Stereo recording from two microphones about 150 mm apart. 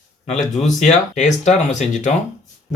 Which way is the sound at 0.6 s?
50° left (ahead or behind).